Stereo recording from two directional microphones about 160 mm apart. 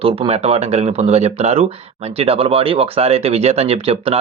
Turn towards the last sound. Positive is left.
turn(degrees=-40)  # may be behind; listen again after turning